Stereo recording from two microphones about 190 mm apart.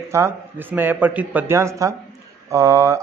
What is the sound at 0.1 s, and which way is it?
Speech, 10° right (ahead or behind).